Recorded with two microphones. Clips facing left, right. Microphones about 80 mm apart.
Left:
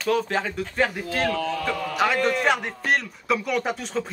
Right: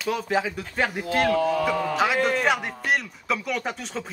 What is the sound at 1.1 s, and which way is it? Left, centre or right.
Speech, right.